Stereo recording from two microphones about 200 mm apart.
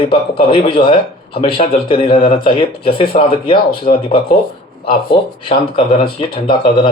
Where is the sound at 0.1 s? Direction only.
25° left (ahead or behind).